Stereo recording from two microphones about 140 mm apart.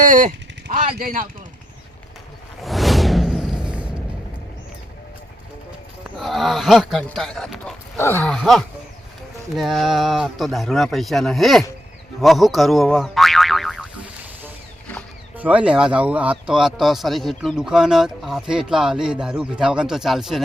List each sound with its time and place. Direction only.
0.0 s speech: 65° right (ahead or behind); by 1.3 s 90° right
2.6 s music: centre (ahead or behind)
6.1 s speech: centre (ahead or behind)
7.9 s speech: 15° left (ahead or behind)
8.3 s speech: centre (ahead or behind)
12.2 s boing: centre (ahead or behind)
15.4 s speech: 10° right (ahead or behind)